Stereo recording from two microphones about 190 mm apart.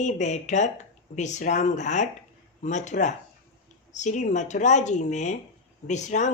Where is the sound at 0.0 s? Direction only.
40° left (ahead or behind).